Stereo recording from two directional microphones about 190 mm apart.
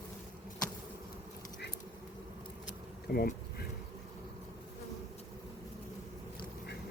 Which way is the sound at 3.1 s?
55° left (ahead or behind).